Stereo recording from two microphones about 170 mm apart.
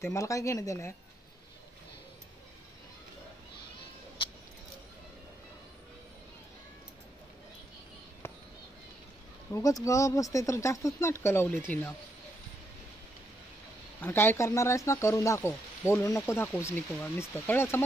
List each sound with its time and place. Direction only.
0.0 s speech: 20° left (ahead or behind)
8.2 s a sound: 15° left (ahead or behind)
9.5 s speech: 20° left (ahead or behind)
14.0 s speech: 15° left (ahead or behind)